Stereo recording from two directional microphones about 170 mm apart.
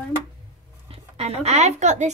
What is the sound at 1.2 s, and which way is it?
Speech, 40° right (ahead or behind).